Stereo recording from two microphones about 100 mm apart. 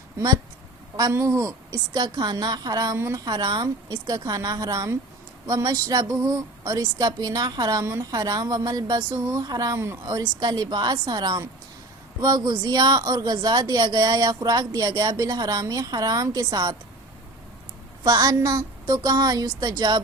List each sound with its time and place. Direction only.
1.1 s a woman's voice: 30° right (ahead or behind)
1.9 s a woman's voice: 45° right (ahead or behind)
18.0 s a woman's voice: 40° right (ahead or behind)